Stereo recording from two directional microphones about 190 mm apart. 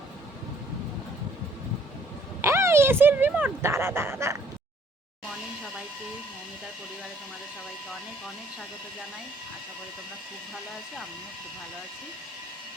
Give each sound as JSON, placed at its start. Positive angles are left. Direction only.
{"t": 2.4, "sound": "speech", "side_deg": -15}